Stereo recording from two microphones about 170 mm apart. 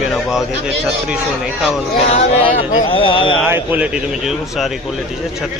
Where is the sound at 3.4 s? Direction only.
10° right (ahead or behind).